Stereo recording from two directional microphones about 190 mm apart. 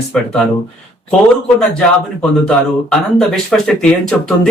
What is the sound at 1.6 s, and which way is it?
Speech, 5° left (ahead or behind).